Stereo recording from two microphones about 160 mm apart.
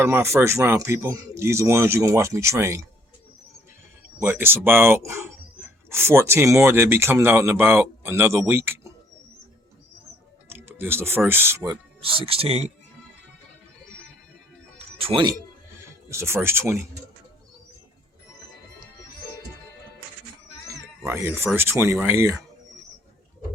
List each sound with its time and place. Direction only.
0.0 s speech: 15° right (ahead or behind)
4.2 s speech: 15° right (ahead or behind)
10.5 s speech: 15° right (ahead or behind)
12.0 s speech: 35° right (ahead or behind)
14.9 s speech: 35° right (ahead or behind)
16.0 s speech: 15° right (ahead or behind)
21.0 s speech: 15° right (ahead or behind)